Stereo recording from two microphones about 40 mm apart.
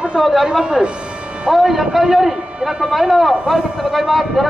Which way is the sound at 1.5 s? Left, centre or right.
Centre.